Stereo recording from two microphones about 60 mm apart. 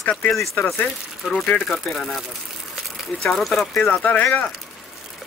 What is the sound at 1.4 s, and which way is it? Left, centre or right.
Speech, centre.